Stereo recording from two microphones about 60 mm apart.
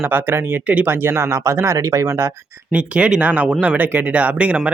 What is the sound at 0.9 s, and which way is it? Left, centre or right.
Speech, right.